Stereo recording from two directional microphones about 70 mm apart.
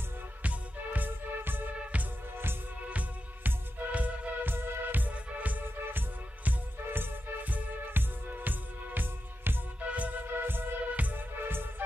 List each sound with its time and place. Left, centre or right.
0.4 s music: right